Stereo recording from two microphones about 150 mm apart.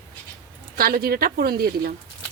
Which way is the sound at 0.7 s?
80° right.